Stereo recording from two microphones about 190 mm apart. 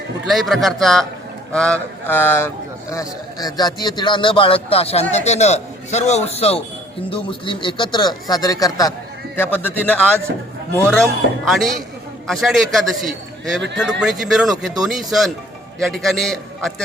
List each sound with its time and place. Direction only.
0.3 s a man's voice: centre (ahead or behind)